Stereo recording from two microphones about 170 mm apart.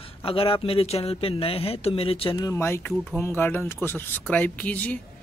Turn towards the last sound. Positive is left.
turn(degrees=10)  # may be behind; listen again after turning